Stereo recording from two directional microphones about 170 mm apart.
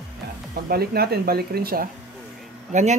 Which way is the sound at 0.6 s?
65° right (ahead or behind).